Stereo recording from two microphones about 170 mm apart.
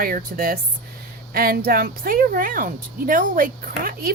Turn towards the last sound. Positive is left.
turn(degrees=-55)  # may be behind; listen again after turning